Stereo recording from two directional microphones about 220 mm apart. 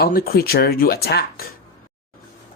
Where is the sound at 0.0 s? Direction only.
45° left (ahead or behind).